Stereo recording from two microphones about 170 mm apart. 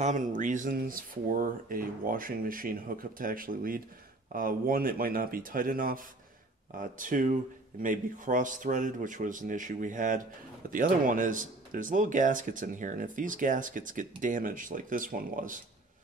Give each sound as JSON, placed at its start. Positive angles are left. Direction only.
{"t": 0.0, "sound": "speech", "side_deg": -50}